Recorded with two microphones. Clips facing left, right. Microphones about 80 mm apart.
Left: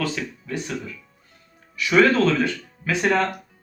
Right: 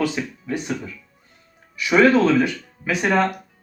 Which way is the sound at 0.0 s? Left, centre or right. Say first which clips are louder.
Right 3 dB; right.